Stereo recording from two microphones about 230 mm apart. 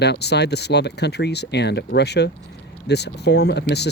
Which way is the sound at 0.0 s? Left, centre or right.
Left.